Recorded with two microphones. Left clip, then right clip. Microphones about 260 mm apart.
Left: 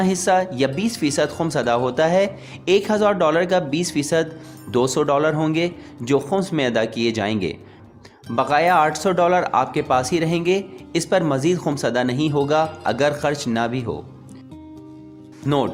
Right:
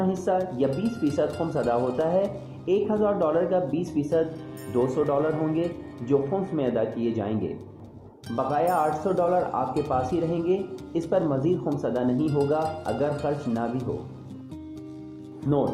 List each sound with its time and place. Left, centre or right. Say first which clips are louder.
0.1 s speech: left 7 dB; left
8.4 s speech: left 7 dB; left